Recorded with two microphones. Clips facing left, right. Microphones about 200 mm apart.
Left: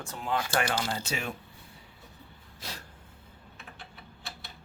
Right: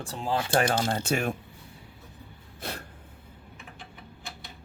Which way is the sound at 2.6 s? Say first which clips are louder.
Right 6 dB; 55° right (ahead or behind).